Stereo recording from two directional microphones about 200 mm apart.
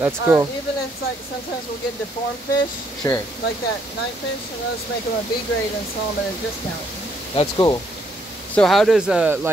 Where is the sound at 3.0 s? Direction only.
15° left (ahead or behind).